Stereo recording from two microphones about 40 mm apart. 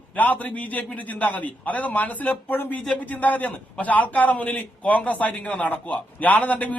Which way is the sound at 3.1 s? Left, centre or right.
Left.